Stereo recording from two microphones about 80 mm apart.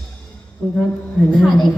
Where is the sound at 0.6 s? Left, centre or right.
Centre.